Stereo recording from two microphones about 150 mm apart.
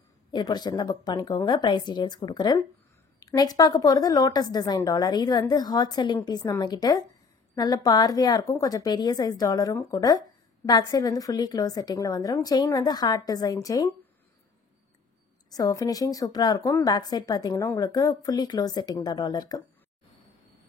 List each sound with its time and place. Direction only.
0.3 s a woman's voice: 30° left (ahead or behind)
15.5 s a woman's voice: 25° left (ahead or behind)